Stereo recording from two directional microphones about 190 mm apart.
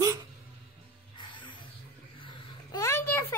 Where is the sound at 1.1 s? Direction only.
25° left (ahead or behind).